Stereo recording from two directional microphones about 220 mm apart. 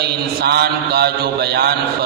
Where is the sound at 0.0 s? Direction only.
45° right (ahead or behind).